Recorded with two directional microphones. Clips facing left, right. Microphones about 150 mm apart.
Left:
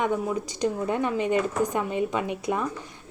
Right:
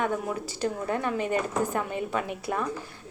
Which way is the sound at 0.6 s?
15° left (ahead or behind).